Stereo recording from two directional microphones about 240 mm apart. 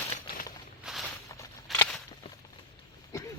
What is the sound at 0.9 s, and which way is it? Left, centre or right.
Walk, centre.